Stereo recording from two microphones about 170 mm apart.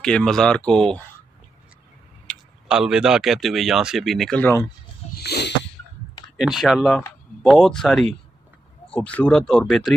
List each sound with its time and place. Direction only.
0.0 s speech: 5° left (ahead or behind)
2.2 s speech: 5° right (ahead or behind)
5.1 s a sound: 70° left (ahead or behind)
6.3 s speech: centre (ahead or behind)